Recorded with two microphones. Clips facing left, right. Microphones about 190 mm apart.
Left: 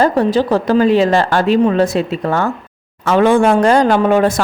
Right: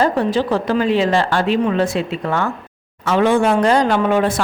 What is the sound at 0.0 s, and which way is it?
Speech, 40° left (ahead or behind).